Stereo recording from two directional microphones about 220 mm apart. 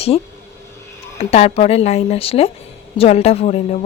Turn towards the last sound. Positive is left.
turn(degrees=30)  # may be behind; listen again after turning